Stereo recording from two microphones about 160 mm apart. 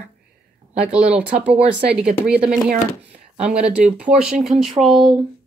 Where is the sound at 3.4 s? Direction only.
5° right (ahead or behind).